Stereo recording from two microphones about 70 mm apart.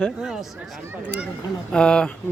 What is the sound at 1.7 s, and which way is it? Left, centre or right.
Speech, centre.